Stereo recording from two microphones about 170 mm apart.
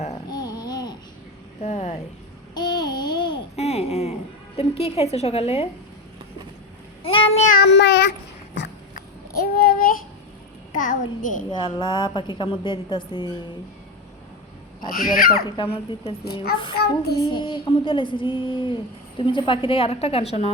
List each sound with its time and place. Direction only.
0.3 s babbling: 25° left (ahead or behind)
1.6 s a sound: 45° left (ahead or behind)
2.6 s babbling: 25° left (ahead or behind)
3.5 s a sound: 40° left (ahead or behind)
4.5 s a woman's voice: 35° left (ahead or behind)
7.0 s child singing: 35° left (ahead or behind)
7.6 s speech: 90° left
9.3 s child singing: 60° left (ahead or behind)
10.8 s a child's voice: 50° left (ahead or behind)
11.6 s a woman's voice: 30° left (ahead or behind)
14.8 s speech: 60° left (ahead or behind)
15.4 s a woman's voice: 30° left (ahead or behind)
16.7 s child singing: 70° left (ahead or behind)
17.3 s a woman's voice: 30° left (ahead or behind)